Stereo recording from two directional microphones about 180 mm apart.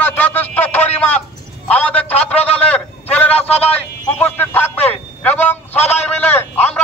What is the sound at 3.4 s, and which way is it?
Speech, 35° left (ahead or behind).